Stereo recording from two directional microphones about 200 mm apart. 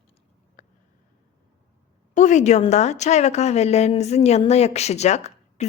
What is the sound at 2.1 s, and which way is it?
A woman's voice, 35° left (ahead or behind).